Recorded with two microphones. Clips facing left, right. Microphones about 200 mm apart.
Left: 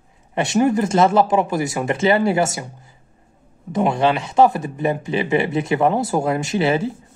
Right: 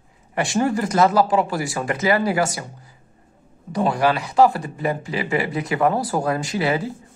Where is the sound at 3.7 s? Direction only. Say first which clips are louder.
Left 2 dB; 25° left (ahead or behind).